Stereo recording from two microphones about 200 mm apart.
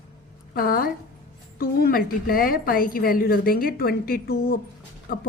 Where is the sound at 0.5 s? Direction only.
45° left (ahead or behind).